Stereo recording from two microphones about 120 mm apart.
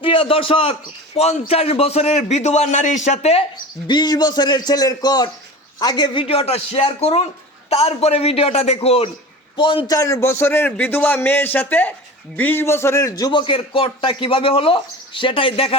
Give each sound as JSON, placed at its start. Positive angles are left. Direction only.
{"t": 0.0, "sound": "a man's voice", "side_deg": 50}
{"t": 3.8, "sound": "a man's voice", "side_deg": 35}
{"t": 6.2, "sound": "a man's voice", "side_deg": 55}
{"t": 9.6, "sound": "a man's voice", "side_deg": 45}
{"t": 9.9, "sound": "a man's voice", "side_deg": 25}